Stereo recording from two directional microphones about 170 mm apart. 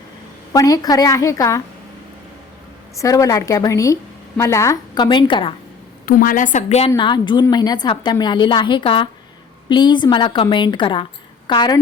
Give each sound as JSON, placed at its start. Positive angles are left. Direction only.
{"t": 0.5, "sound": "a woman's voice", "side_deg": 20}
{"t": 3.0, "sound": "a woman's voice", "side_deg": 20}
{"t": 6.1, "sound": "a woman's voice", "side_deg": 55}